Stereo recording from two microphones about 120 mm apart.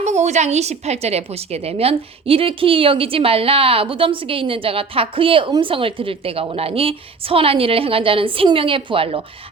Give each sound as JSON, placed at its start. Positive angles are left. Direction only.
{"t": 0.0, "sound": "a woman's voice", "side_deg": -70}